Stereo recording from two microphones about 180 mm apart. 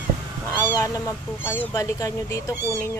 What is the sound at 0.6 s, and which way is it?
Speech, 20° left (ahead or behind).